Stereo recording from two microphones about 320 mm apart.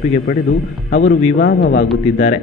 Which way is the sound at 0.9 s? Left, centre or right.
Left.